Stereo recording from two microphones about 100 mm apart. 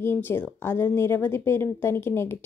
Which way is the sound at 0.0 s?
25° left (ahead or behind).